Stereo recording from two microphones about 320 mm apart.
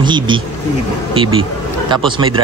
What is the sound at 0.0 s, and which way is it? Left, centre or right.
Speech, centre.